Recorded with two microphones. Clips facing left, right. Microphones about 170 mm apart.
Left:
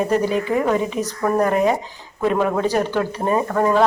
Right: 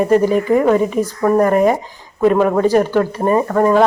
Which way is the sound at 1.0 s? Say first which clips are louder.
Right 5 dB; 10° right (ahead or behind).